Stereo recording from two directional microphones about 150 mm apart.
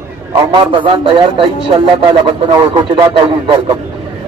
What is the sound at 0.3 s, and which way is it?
Speech, 35° right (ahead or behind).